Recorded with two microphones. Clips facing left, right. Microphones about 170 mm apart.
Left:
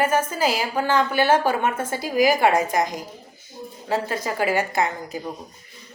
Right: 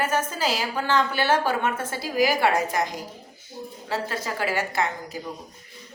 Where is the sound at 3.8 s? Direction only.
15° left (ahead or behind).